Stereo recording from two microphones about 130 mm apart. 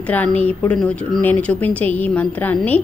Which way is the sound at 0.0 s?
10° left (ahead or behind).